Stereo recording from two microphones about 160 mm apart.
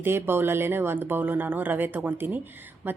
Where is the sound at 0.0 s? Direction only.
15° right (ahead or behind).